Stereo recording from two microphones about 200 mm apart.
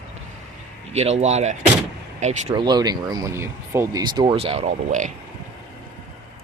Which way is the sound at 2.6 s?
20° right (ahead or behind).